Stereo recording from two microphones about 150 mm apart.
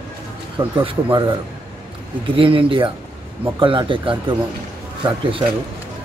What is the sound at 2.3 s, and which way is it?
Speech, 35° right (ahead or behind).